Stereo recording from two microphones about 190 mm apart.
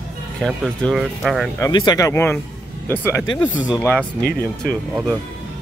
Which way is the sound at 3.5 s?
5° right (ahead or behind).